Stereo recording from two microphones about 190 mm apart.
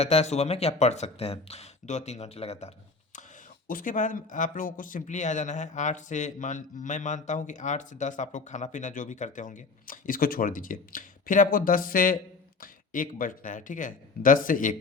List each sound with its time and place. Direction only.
0.0 s speech: 35° left (ahead or behind)
3.7 s speech: 45° left (ahead or behind)